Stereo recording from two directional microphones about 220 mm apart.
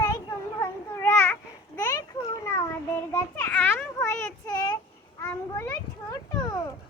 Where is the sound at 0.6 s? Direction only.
10° left (ahead or behind).